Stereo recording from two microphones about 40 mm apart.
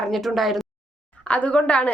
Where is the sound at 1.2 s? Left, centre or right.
Left.